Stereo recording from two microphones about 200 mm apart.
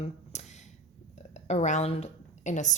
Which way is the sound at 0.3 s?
35° left (ahead or behind).